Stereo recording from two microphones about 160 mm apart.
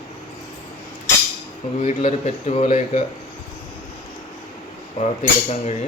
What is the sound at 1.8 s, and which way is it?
Cutlery, 45° left (ahead or behind).